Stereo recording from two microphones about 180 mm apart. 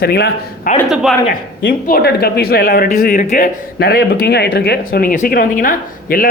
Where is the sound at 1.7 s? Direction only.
55° left (ahead or behind).